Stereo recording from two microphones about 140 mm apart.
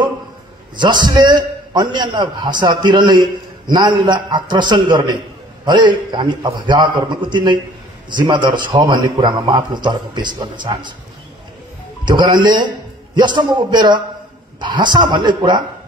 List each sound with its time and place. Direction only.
0.7 s a man's voice: 30° right (ahead or behind)
12.0 s a man's voice: 35° right (ahead or behind)